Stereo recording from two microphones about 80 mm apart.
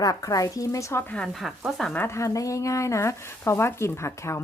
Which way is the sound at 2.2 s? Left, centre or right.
Left.